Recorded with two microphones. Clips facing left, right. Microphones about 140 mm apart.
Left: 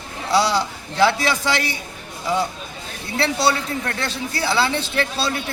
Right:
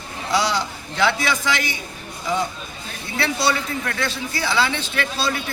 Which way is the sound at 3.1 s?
35° left (ahead or behind).